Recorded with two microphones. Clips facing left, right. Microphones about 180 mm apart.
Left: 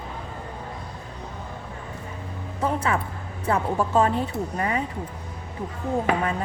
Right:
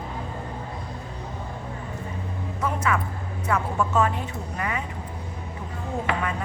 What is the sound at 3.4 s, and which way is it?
Speech, 30° left (ahead or behind).